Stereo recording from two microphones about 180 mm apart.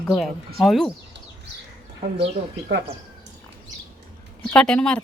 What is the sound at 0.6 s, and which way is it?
Speech, centre (ahead or behind).